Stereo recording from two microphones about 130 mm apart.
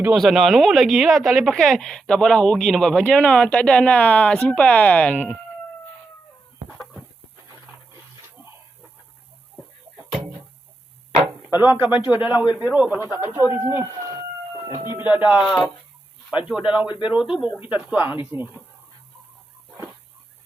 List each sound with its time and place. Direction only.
0.1 s speech: centre (ahead or behind)
11.6 s a man's voice: 15° right (ahead or behind)
16.8 s speech: 40° left (ahead or behind)
17.1 s a man's voice: 5° right (ahead or behind)